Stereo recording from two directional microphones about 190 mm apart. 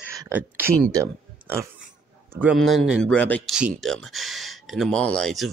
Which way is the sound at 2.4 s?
5° right (ahead or behind).